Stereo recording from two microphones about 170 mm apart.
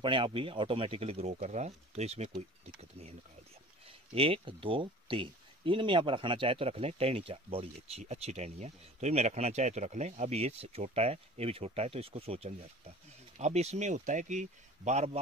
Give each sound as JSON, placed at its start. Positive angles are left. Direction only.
{"t": 0.0, "sound": "speech", "side_deg": -30}
{"t": 3.8, "sound": "speech", "side_deg": -35}